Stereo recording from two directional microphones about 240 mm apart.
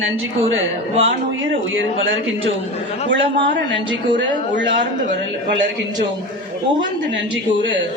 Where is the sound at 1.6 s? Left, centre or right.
Right.